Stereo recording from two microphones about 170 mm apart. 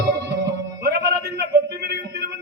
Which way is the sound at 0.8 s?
70° right (ahead or behind).